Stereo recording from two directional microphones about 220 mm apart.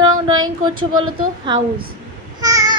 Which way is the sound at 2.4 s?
15° right (ahead or behind).